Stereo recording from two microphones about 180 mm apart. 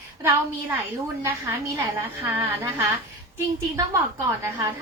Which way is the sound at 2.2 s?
15° right (ahead or behind).